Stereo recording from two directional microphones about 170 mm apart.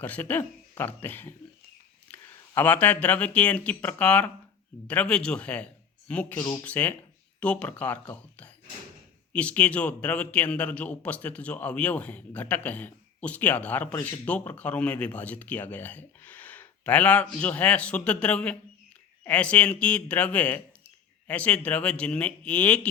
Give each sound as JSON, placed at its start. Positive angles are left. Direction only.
{"t": 0.0, "sound": "a man's voice", "side_deg": 10}